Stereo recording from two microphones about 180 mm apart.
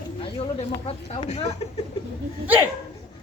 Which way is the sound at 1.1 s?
35° left (ahead or behind).